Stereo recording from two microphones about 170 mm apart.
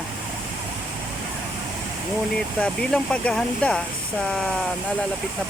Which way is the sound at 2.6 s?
5° left (ahead or behind).